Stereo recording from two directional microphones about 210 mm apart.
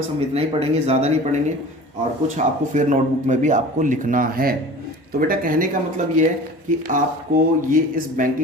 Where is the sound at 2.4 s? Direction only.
35° right (ahead or behind).